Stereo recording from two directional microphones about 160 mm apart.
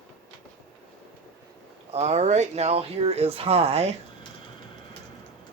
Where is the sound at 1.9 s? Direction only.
45° right (ahead or behind).